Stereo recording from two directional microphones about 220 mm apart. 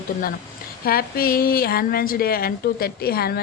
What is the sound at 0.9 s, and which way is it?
A woman's voice, 40° left (ahead or behind).